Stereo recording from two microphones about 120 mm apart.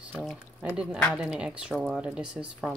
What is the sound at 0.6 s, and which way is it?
Speech, 5° right (ahead or behind).